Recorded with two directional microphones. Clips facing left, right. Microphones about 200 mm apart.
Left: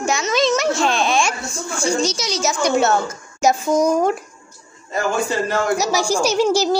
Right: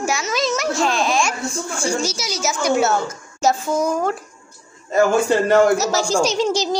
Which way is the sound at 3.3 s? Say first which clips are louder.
Left 2 dB; 15° left (ahead or behind).